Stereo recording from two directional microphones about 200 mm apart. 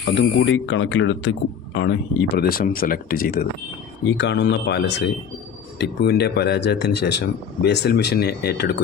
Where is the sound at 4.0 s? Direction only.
60° left (ahead or behind).